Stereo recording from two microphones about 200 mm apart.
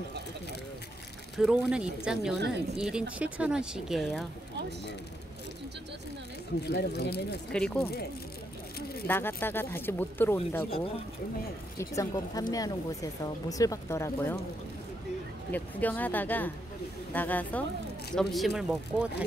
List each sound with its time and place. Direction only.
1.3 s speech: 5° right (ahead or behind)
6.7 s speech: 55° left (ahead or behind)
7.5 s speech: 5° left (ahead or behind)
9.0 s speech: 10° left (ahead or behind)
11.8 s speech: 15° left (ahead or behind)
15.5 s speech: 10° left (ahead or behind)